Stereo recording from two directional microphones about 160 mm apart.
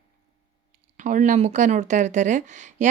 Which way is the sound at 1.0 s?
50° right (ahead or behind).